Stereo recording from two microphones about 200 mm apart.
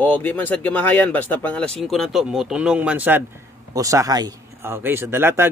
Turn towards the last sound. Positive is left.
turn(degrees=-10)  # may be behind; listen again after turning